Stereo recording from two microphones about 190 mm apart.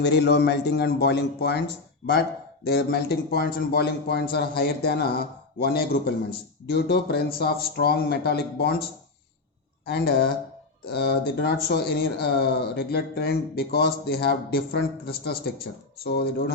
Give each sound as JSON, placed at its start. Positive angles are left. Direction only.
{"t": 0.0, "sound": "speech", "side_deg": 65}
{"t": 2.6, "sound": "speech", "side_deg": 55}
{"t": 9.8, "sound": "speech", "side_deg": 60}